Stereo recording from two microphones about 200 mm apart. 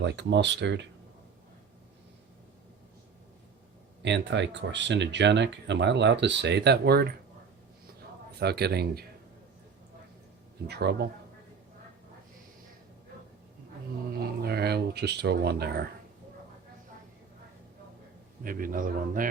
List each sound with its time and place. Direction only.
0.0 s speech: 60° right (ahead or behind)
4.0 s speech: 60° right (ahead or behind)
8.4 s a man's voice: 55° right (ahead or behind)
10.7 s speech: 55° right (ahead or behind)
14.1 s a sound: 50° right (ahead or behind)
18.4 s a man's voice: 45° right (ahead or behind)